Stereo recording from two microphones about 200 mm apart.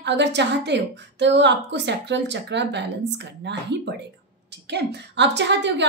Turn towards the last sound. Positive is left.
turn(degrees=-60)  # may be behind; listen again after turning